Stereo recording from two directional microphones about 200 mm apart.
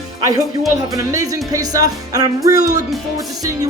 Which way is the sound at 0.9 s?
15° right (ahead or behind).